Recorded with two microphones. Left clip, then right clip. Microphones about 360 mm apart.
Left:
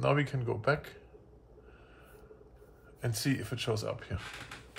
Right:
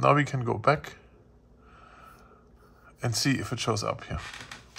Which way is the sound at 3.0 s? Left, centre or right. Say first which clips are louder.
Right 6 dB; right.